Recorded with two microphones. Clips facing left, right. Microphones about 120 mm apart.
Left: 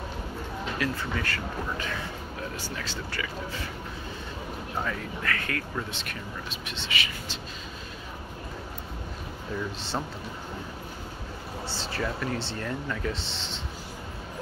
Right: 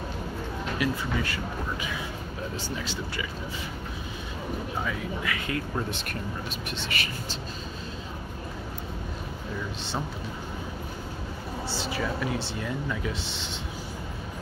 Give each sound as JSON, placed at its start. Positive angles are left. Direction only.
{"t": 0.7, "sound": "speech", "side_deg": -15}
{"t": 4.8, "sound": "speech", "side_deg": -10}
{"t": 5.9, "sound": "speech", "side_deg": -50}
{"t": 11.9, "sound": "speech", "side_deg": -5}